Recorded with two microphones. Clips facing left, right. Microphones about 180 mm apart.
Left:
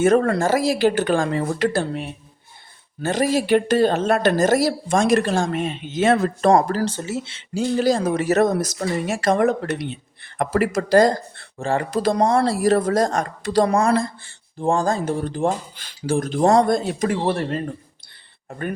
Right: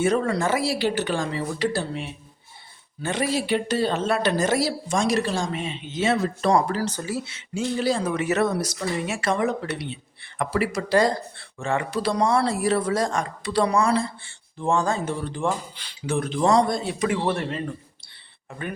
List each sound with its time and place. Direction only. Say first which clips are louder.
0.0 s speech: left 5 dB; 50° left (ahead or behind)
3.0 s speech: left 5 dB; 40° left (ahead or behind)
6.8 s speech: left 3 dB; 25° left (ahead or behind)
7.8 s speech: left 5 dB; 40° left (ahead or behind)
14.6 s speech: left 3 dB; 35° left (ahead or behind)